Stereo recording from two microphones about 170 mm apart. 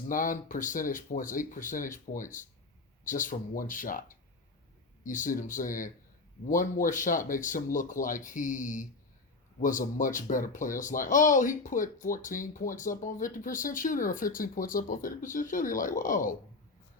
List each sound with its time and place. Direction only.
0.1 s speech: 50° left (ahead or behind)
5.0 s speech: 50° left (ahead or behind)